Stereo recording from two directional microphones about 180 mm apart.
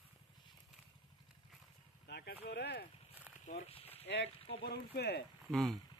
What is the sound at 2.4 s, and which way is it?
Speech, 65° left (ahead or behind).